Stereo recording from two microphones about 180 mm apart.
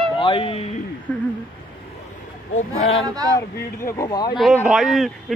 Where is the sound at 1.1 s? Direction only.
10° left (ahead or behind).